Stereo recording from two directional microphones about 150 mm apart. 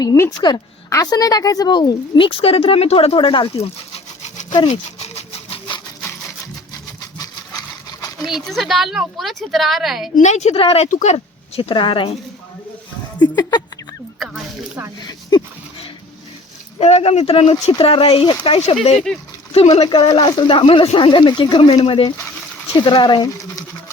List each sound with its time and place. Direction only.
0.0 s a woman's voice: 25° left (ahead or behind)
4.2 s toothbrush: 55° left (ahead or behind)
4.7 s a sound: 45° left (ahead or behind)
8.3 s speech: centre (ahead or behind)
10.2 s speech: 50° left (ahead or behind)
10.5 s speech: 40° left (ahead or behind)
13.1 s speech: 30° left (ahead or behind)
16.7 s speech: 45° left (ahead or behind)